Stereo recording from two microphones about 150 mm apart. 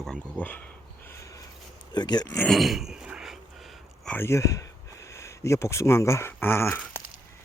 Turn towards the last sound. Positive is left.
turn(degrees=15)  # may be behind; listen again after turning